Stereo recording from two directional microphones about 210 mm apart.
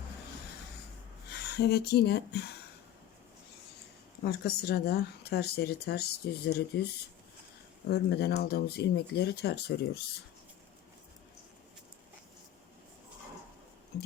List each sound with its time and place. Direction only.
1.3 s speech: 50° left (ahead or behind)
4.2 s speech: 50° left (ahead or behind)
7.9 s speech: 50° left (ahead or behind)